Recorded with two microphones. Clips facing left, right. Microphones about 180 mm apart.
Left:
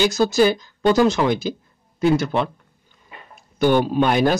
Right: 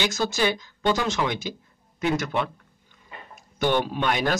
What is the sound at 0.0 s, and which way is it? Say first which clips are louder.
Speech: left 8 dB; 35° left (ahead or behind).